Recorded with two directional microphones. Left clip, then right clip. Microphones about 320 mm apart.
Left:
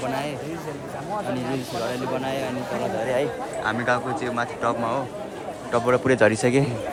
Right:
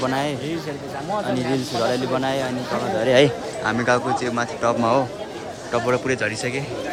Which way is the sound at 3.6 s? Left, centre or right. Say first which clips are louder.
Right 4 dB; centre.